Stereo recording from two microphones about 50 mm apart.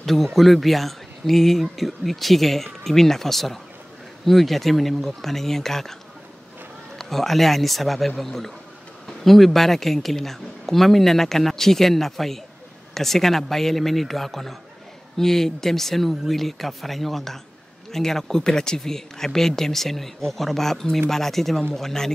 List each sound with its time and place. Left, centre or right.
0.0 s speech: centre
7.0 s speech: centre